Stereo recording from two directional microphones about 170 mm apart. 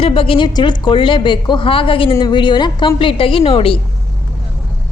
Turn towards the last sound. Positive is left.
turn(degrees=30)  # may be behind; listen again after turning